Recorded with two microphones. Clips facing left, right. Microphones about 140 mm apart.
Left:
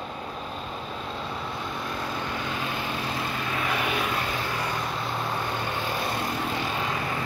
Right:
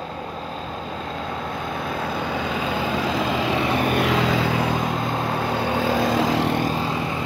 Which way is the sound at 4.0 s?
90° right.